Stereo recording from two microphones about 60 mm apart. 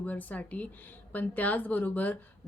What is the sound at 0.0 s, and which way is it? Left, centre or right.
Speech, left.